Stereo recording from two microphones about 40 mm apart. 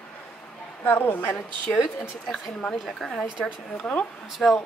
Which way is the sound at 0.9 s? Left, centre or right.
Left.